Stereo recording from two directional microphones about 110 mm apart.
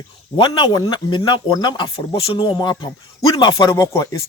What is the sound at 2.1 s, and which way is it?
Speech, 55° left (ahead or behind).